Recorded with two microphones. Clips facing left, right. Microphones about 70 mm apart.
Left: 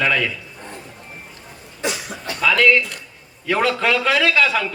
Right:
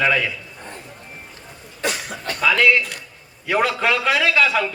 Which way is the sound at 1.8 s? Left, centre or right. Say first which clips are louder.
Even; right.